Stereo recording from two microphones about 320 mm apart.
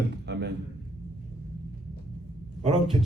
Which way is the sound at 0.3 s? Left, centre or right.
Right.